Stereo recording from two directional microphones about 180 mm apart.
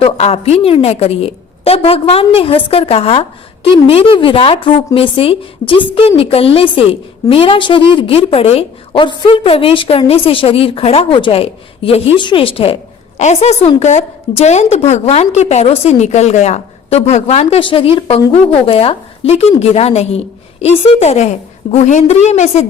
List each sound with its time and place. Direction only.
0.0 s a woman's voice: 35° left (ahead or behind)